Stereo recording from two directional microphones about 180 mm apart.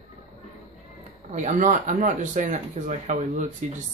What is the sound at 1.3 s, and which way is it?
Speech, 45° right (ahead or behind).